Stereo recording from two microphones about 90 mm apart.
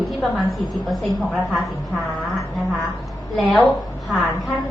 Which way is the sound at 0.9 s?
Centre (ahead or behind).